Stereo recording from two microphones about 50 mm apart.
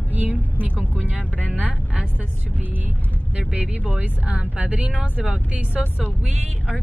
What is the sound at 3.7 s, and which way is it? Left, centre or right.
Speech, right.